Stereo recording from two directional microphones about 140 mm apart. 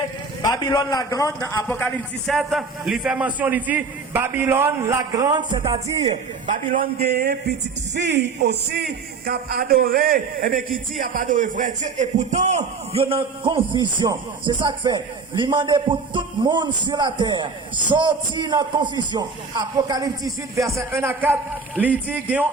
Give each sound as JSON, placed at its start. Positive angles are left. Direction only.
{"t": 0.4, "sound": "a man's voice", "side_deg": 25}
{"t": 1.6, "sound": "speech", "side_deg": 15}
{"t": 2.2, "sound": "a man's voice", "side_deg": 0}
{"t": 6.5, "sound": "a man's voice", "side_deg": -75}
{"t": 9.2, "sound": "a man's voice", "side_deg": -90}
{"t": 11.0, "sound": "a man's voice", "side_deg": -75}